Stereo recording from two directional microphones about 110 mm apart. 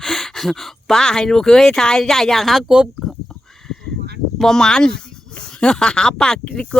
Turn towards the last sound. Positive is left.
turn(degrees=10)  # may be behind; listen again after turning